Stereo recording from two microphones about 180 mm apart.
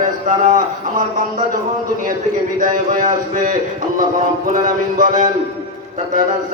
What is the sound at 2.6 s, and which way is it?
A man's voice, 45° right (ahead or behind).